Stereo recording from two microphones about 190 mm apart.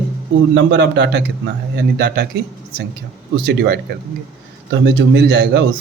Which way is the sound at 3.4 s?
60° right (ahead or behind).